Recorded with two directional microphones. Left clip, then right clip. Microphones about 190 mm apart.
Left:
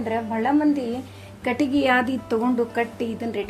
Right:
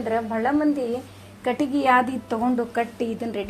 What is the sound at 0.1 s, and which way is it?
A woman's voice, 15° left (ahead or behind).